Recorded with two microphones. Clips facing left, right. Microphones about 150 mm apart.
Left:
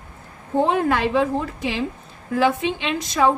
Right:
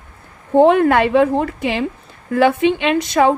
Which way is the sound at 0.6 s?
65° right (ahead or behind).